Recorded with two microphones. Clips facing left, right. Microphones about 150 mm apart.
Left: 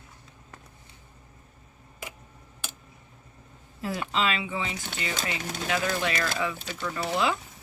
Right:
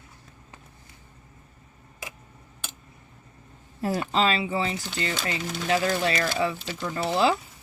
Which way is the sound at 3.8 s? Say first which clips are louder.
Right 4 dB; 40° right (ahead or behind).